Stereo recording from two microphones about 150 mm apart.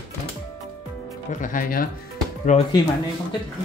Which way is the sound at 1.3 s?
60° left (ahead or behind).